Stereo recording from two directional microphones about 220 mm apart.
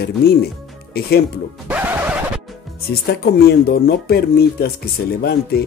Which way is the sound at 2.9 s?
45° left (ahead or behind).